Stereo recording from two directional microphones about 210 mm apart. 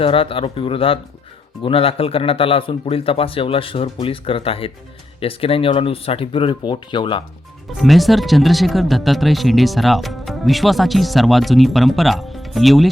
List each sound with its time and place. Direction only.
0.0 s speech: 25° left (ahead or behind)
7.8 s speech: centre (ahead or behind)